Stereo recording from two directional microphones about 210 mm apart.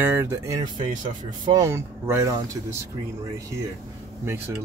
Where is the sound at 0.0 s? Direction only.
10° right (ahead or behind).